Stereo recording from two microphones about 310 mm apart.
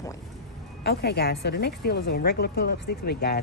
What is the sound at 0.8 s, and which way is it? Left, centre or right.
A woman's voice, left.